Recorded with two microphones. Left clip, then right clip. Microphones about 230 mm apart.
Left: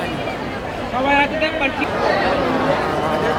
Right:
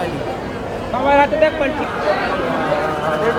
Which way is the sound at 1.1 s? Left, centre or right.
Centre.